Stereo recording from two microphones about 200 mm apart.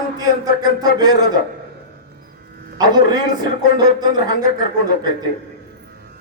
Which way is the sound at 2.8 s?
20° right (ahead or behind).